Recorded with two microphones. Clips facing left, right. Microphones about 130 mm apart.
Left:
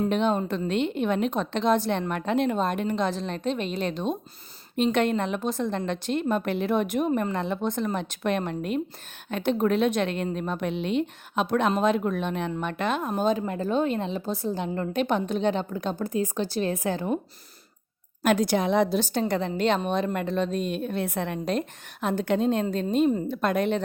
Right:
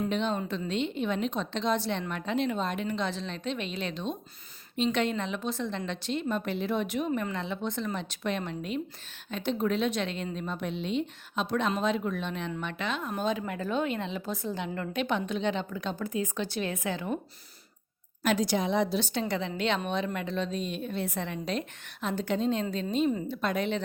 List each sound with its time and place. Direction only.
0.1 s a woman's voice: 50° left (ahead or behind)
18.2 s speech: 55° left (ahead or behind)
18.9 s a woman's voice: 45° left (ahead or behind)